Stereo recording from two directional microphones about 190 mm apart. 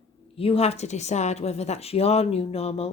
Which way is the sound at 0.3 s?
30° left (ahead or behind).